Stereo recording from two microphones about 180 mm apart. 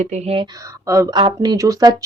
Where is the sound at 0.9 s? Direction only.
15° right (ahead or behind).